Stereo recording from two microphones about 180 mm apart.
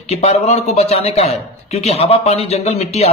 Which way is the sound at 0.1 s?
35° left (ahead or behind).